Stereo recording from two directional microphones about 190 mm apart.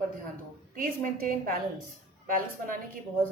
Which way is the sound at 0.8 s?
50° right (ahead or behind).